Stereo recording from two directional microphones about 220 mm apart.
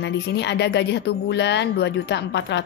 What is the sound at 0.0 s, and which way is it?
Speech, 50° left (ahead or behind).